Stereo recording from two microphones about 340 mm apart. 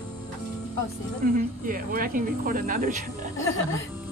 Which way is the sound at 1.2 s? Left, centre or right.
Right.